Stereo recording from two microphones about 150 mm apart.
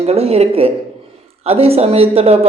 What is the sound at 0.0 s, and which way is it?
A woman's voice, 45° right (ahead or behind).